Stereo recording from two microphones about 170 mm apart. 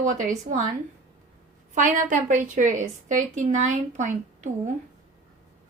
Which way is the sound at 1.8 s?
50° right (ahead or behind).